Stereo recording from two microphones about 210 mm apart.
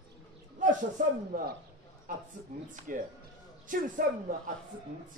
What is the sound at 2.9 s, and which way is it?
Speech, 40° right (ahead or behind).